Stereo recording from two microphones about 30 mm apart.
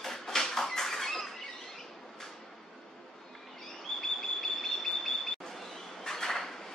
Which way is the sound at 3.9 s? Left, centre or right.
Centre.